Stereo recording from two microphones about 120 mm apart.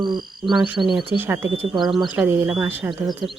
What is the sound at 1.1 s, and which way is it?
Speech, 15° right (ahead or behind).